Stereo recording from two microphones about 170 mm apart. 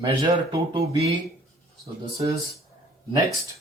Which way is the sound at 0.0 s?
30° right (ahead or behind).